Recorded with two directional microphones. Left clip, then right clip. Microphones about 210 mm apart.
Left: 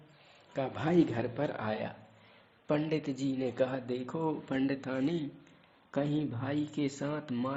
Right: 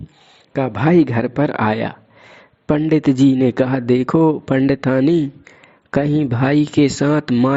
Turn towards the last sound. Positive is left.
turn(degrees=-45)  # may be behind; listen again after turning